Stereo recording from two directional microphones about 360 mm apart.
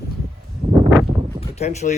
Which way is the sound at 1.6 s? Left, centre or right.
Centre.